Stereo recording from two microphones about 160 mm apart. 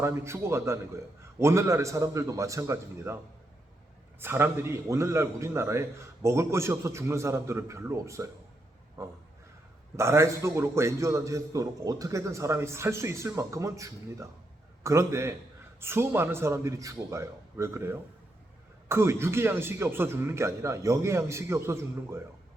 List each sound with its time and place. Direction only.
0.0 s a man's voice: 15° right (ahead or behind)
4.2 s a man's voice: 15° right (ahead or behind)
10.0 s a man's voice: 15° right (ahead or behind)